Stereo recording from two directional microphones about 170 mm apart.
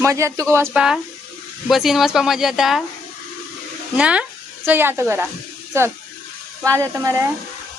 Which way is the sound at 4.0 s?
5° right (ahead or behind).